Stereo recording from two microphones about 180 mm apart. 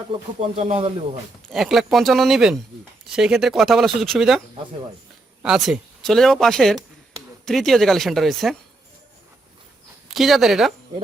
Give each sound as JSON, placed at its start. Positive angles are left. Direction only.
{"t": 0.3, "sound": "speech", "side_deg": -35}
{"t": 1.5, "sound": "speech", "side_deg": 0}
{"t": 5.4, "sound": "speech", "side_deg": 0}
{"t": 10.1, "sound": "speech", "side_deg": 0}